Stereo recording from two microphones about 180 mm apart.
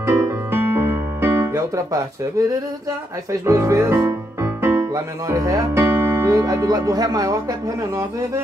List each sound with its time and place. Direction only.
0.0 s music: 15° right (ahead or behind)
3.3 s speech: 15° right (ahead or behind)